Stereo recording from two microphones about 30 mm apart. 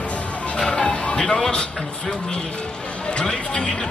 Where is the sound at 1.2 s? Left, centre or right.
Centre.